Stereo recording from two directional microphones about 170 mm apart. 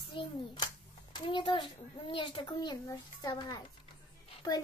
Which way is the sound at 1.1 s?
30° left (ahead or behind).